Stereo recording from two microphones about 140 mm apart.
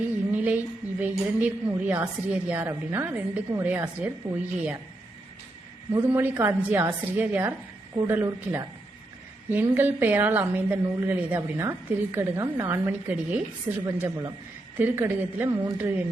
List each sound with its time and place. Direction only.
0.3 s a sound: 10° right (ahead or behind)
1.4 s a woman's voice: 10° right (ahead or behind)
6.1 s a woman's voice: 15° right (ahead or behind)
13.8 s a woman's voice: 25° right (ahead or behind)